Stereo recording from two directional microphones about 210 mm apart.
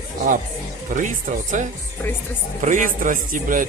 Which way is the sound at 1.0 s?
35° right (ahead or behind).